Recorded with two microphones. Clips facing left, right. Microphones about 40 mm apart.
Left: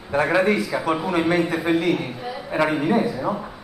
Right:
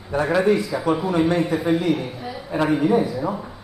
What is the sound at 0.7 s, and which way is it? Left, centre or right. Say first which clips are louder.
Speech: left 1 dB; left.